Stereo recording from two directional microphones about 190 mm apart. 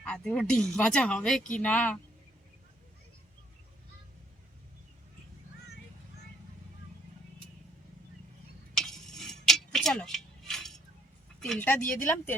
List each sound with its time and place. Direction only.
0.0 s speech: 5° left (ahead or behind)
0.5 s speech: 40° left (ahead or behind)
0.8 s a woman's voice: 5° left (ahead or behind)
8.8 s a sound: centre (ahead or behind)
11.3 s speech: 5° left (ahead or behind)